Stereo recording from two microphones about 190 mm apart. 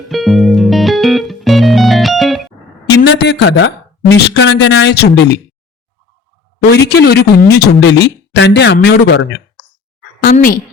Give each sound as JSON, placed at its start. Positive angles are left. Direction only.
{"t": 0.1, "sound": "music", "side_deg": 0}
{"t": 2.9, "sound": "speech", "side_deg": 65}
{"t": 6.7, "sound": "speech", "side_deg": 60}
{"t": 10.2, "sound": "speech", "side_deg": 45}